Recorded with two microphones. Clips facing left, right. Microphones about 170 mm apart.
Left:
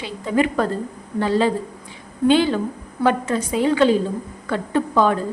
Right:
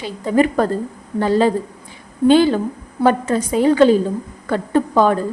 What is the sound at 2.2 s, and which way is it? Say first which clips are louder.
A woman's voice: right 4 dB; 40° right (ahead or behind).